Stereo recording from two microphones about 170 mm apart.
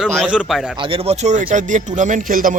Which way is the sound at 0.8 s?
30° right (ahead or behind).